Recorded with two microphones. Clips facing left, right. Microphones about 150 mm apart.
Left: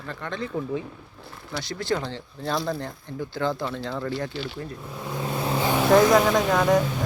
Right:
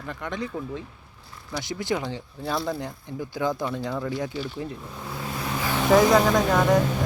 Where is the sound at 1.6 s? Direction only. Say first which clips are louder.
Even; 15° right (ahead or behind).